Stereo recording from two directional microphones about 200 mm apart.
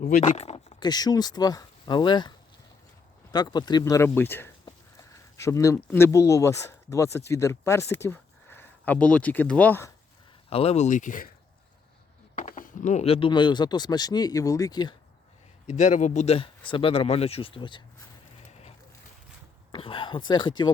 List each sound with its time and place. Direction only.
0.2 s speech: 35° left (ahead or behind)
0.8 s speech: 20° left (ahead or behind)
3.3 s speech: 20° left (ahead or behind)
10.5 s speech: 30° left (ahead or behind)
12.4 s speech: 40° left (ahead or behind); by 14.9 s 20° left (ahead or behind)
15.6 s speech: 35° left (ahead or behind)
19.7 s a sound: 25° left (ahead or behind)